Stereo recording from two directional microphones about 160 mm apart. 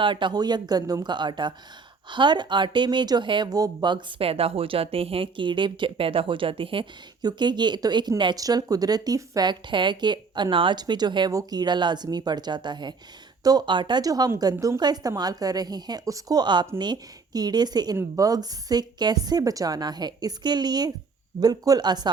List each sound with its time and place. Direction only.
0.0 s speech: 30° right (ahead or behind)